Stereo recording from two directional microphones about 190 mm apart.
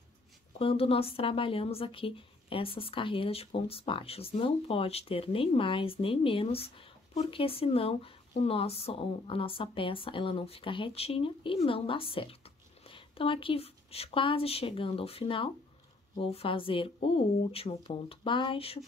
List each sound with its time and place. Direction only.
0.6 s a woman's voice: 30° left (ahead or behind)